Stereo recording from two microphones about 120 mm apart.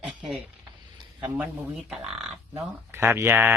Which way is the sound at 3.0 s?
20° right (ahead or behind).